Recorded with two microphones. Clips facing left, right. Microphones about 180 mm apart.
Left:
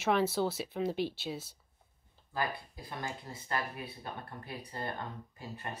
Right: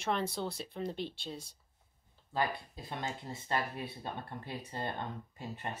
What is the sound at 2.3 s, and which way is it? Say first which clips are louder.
Speech: right 2 dB; 25° right (ahead or behind).